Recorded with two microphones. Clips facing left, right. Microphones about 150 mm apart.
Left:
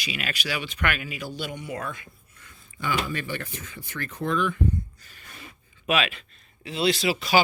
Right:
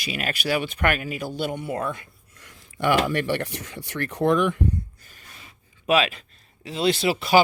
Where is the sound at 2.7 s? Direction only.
80° right.